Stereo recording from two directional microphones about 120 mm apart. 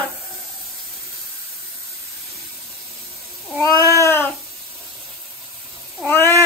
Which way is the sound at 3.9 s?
20° left (ahead or behind).